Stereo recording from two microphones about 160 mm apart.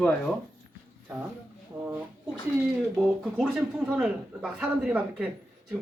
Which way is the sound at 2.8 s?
Centre (ahead or behind).